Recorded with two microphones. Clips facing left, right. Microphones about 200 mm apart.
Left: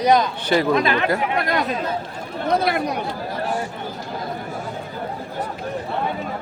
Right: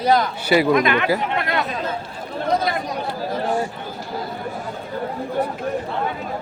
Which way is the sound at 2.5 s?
65° left (ahead or behind).